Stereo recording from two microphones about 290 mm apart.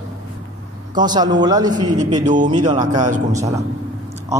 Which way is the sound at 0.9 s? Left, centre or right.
Centre.